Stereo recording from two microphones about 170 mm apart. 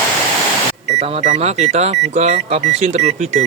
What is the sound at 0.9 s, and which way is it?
Speech, 40° right (ahead or behind).